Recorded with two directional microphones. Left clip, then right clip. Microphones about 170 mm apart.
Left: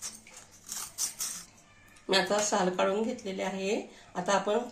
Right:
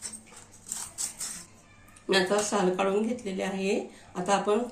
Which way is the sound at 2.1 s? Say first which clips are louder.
Right 2 dB; 60° left (ahead or behind).